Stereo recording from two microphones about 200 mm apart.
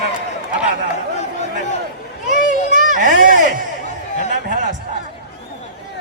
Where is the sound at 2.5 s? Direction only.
40° right (ahead or behind).